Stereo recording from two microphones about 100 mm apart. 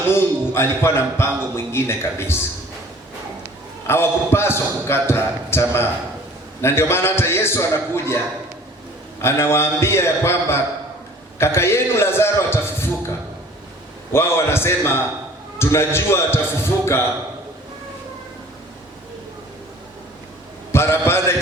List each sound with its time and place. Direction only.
0.1 s speech: 25° left (ahead or behind)
3.8 s speech: 25° left (ahead or behind)
9.2 s speech: 25° left (ahead or behind)
14.1 s a man's voice: 25° left (ahead or behind)
20.7 s speech: 25° left (ahead or behind)